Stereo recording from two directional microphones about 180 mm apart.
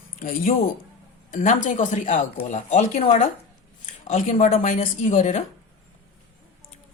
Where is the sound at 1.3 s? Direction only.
45° left (ahead or behind).